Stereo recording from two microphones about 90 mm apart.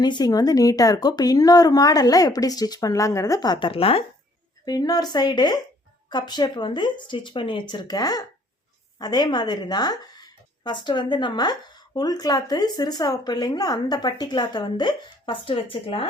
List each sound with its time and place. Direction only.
0.0 s speech: 50° left (ahead or behind)
3.6 s speech: 90° left
4.6 s a woman's voice: 45° left (ahead or behind); by 15.6 s 70° left (ahead or behind)
15.7 s speech: 90° left